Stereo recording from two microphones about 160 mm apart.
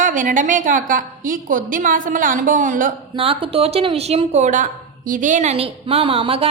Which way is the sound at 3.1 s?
35° right (ahead or behind).